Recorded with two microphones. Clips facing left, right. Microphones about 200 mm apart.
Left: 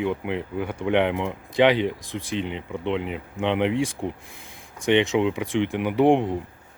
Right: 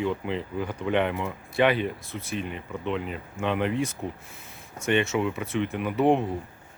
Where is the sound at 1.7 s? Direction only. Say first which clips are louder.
Left 4 dB; 85° left.